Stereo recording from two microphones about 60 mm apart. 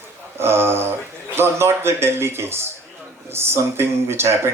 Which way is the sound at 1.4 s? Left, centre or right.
Right.